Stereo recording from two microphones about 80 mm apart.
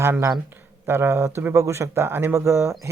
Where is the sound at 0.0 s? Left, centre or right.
Right.